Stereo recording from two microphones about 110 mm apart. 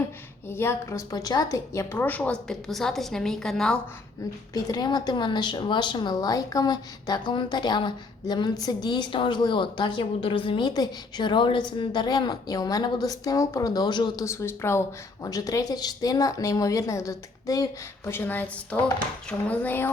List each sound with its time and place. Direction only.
0.4 s a woman's voice: 20° left (ahead or behind); by 3.8 s 5° left (ahead or behind)
4.5 s a woman's voice: 35° left (ahead or behind); by 10.7 s 55° left (ahead or behind)
10.7 s a woman's voice: 40° left (ahead or behind)
14.3 s a woman's voice: 25° left (ahead or behind)
18.1 s a woman's voice: 20° left (ahead or behind)